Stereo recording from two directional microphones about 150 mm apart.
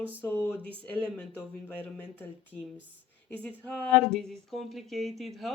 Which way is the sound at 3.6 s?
5° left (ahead or behind).